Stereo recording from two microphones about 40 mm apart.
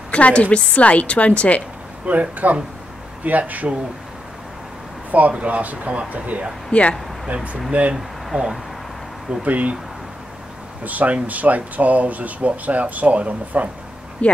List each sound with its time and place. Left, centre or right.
0.1 s a woman's voice: left
2.0 s speech: right
5.3 s speech: right
6.7 s speech: left
7.7 s speech: right
8.3 s speech: centre
9.3 s speech: right
10.8 s speech: right
14.2 s speech: left